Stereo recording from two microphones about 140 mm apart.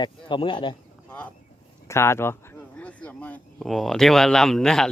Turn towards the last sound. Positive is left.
turn(degrees=5)  # may be behind; listen again after turning